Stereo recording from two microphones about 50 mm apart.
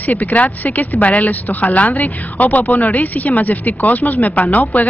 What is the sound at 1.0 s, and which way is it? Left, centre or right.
A woman's voice, left.